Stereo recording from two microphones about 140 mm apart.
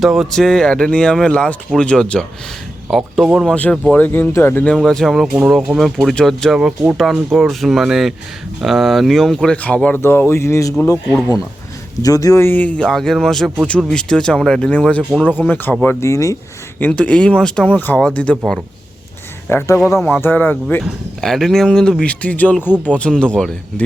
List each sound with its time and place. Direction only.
0.0 s speech: centre (ahead or behind); by 10.8 s 20° left (ahead or behind)
12.0 s speech: 25° left (ahead or behind)
16.8 s speech: 10° left (ahead or behind)
19.5 s speech: 20° left (ahead or behind)
22.7 s speech: 10° right (ahead or behind)
23.0 s speech: 5° left (ahead or behind)